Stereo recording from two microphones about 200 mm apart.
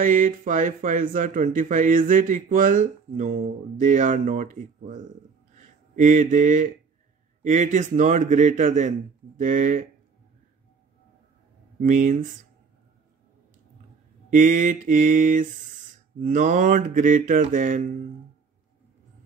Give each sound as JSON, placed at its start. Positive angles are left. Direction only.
{"t": 0.0, "sound": "speech", "side_deg": -40}
{"t": 11.8, "sound": "speech", "side_deg": -40}
{"t": 14.3, "sound": "speech", "side_deg": -40}